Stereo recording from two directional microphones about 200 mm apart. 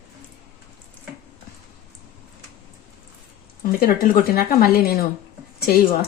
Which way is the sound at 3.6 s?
45° left (ahead or behind).